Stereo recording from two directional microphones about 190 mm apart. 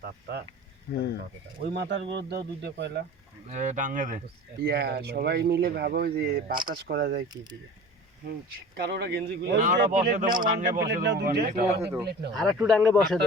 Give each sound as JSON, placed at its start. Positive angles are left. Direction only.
{"t": 0.0, "sound": "speech", "side_deg": -60}
{"t": 0.9, "sound": "speech", "side_deg": 55}
{"t": 1.6, "sound": "speech", "side_deg": -65}
{"t": 3.5, "sound": "speech", "side_deg": -40}
{"t": 4.6, "sound": "speech", "side_deg": -60}
{"t": 8.7, "sound": "speech", "side_deg": -60}
{"t": 9.6, "sound": "speech", "side_deg": -40}
{"t": 10.8, "sound": "speech", "side_deg": -65}
{"t": 11.8, "sound": "speech", "side_deg": -10}
{"t": 12.3, "sound": "speech", "side_deg": 0}